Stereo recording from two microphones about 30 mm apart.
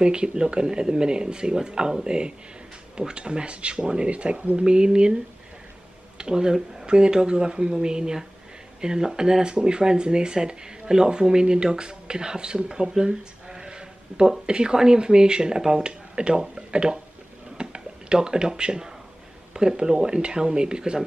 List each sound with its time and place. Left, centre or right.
0.0 s speech: right
6.1 s speech: right
13.0 s a sound: right
14.4 s speech: right
17.6 s a sound: right
19.5 s speech: right